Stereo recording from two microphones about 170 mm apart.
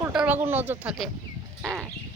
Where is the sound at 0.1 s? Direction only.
5° right (ahead or behind).